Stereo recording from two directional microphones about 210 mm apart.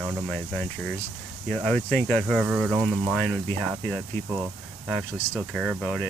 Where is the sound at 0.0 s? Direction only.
Centre (ahead or behind).